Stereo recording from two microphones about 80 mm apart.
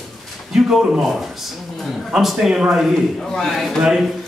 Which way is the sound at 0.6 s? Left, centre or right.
Centre.